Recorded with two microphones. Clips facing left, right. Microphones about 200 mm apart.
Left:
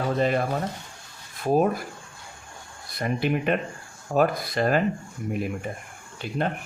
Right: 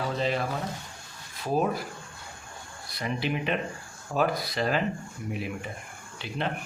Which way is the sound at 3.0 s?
50° left (ahead or behind).